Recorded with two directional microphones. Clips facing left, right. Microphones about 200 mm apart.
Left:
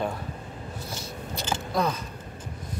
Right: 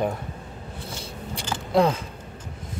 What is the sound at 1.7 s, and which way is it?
Speech, 30° right (ahead or behind).